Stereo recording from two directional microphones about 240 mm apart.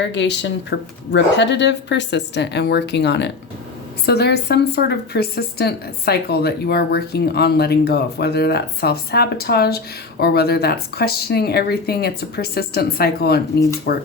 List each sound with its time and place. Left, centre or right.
0.0 s a woman's voice: left